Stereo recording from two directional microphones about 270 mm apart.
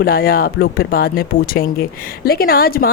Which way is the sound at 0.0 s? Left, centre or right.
Left.